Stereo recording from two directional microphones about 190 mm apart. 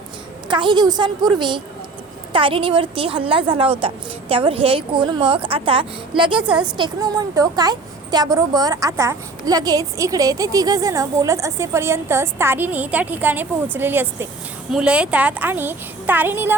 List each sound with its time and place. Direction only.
0.4 s a woman's voice: 25° right (ahead or behind)